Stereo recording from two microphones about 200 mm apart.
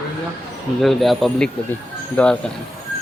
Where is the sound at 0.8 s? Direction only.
Centre (ahead or behind).